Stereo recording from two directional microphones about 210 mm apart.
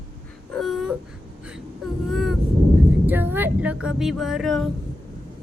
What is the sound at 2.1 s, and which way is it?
Vehicle, centre (ahead or behind).